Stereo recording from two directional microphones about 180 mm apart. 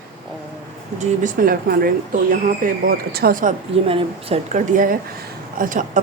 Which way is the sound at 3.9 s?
35° right (ahead or behind).